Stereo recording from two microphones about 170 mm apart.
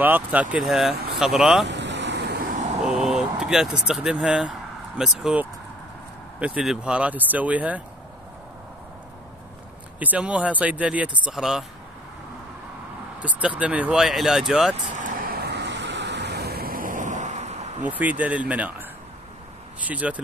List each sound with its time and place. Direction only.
0.0 s speech: 10° right (ahead or behind)
1.7 s vehicle: 90° right
2.8 s speech: 5° right (ahead or behind)
9.9 s speech: 10° right (ahead or behind)
13.2 s speech: 5° right (ahead or behind)
14.9 s vehicle: 50° right (ahead or behind)
17.8 s speech: 10° right (ahead or behind)
19.9 s speech: 10° right (ahead or behind)